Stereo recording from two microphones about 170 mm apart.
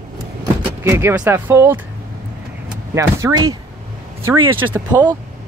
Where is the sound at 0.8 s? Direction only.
15° right (ahead or behind).